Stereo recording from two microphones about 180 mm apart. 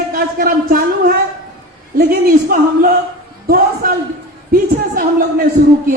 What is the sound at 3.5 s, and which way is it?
Speech, 55° right (ahead or behind).